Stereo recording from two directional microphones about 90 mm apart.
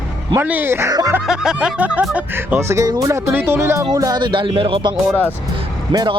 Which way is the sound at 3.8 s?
40° right (ahead or behind).